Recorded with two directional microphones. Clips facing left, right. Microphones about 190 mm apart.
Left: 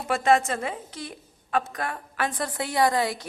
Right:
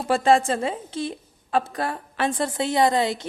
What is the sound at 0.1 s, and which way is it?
A woman's voice, 30° right (ahead or behind).